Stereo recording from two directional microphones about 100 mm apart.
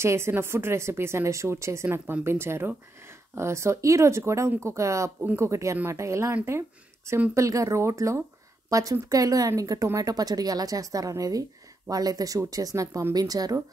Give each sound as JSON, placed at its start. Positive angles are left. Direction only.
{"t": 0.0, "sound": "a woman's voice", "side_deg": -25}